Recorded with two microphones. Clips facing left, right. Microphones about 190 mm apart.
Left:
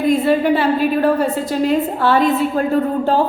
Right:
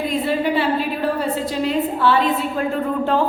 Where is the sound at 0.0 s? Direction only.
45° left (ahead or behind).